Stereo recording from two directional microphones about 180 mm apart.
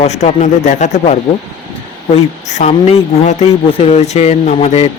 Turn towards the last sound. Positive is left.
turn(degrees=40)  # may be behind; listen again after turning